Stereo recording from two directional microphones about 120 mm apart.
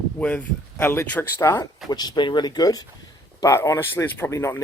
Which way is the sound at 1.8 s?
35° left (ahead or behind).